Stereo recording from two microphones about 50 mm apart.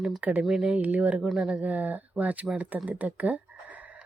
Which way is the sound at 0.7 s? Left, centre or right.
Right.